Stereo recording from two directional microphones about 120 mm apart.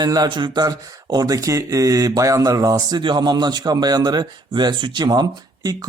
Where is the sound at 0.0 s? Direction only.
35° right (ahead or behind).